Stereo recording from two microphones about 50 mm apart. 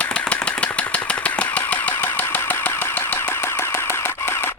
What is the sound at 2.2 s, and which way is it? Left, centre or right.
Engine, left.